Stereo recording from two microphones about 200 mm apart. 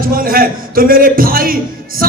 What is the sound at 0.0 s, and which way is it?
A man's voice, 45° right (ahead or behind).